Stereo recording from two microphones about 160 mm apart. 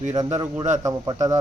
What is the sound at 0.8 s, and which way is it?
Speech, 20° right (ahead or behind).